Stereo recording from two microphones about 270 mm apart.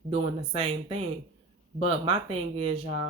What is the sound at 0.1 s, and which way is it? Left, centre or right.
Speech, right.